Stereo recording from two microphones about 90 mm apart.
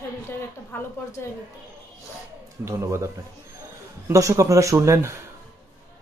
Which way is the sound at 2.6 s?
30° right (ahead or behind).